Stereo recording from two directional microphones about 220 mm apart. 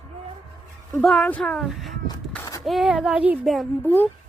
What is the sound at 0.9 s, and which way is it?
Speech, 5° left (ahead or behind).